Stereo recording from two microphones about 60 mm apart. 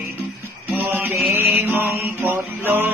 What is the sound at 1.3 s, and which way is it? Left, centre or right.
Music, right.